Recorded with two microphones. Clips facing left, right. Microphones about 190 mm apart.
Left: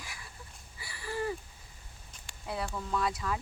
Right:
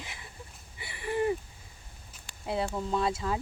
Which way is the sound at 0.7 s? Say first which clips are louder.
Right 6 dB; 20° right (ahead or behind).